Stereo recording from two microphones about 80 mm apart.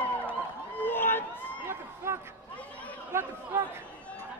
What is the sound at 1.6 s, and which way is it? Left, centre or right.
Run, right.